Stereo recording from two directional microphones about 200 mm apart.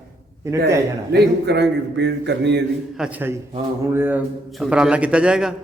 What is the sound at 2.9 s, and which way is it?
A man's voice, 5° right (ahead or behind).